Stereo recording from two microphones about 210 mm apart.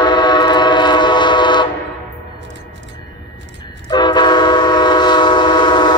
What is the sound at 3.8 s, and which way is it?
Train, 20° left (ahead or behind).